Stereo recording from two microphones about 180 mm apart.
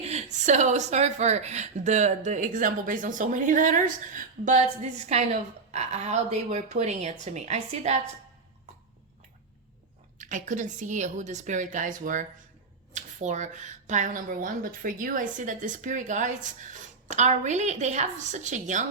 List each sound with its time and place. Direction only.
0.0 s a woman's voice: 40° right (ahead or behind)
10.2 s speech: 45° right (ahead or behind)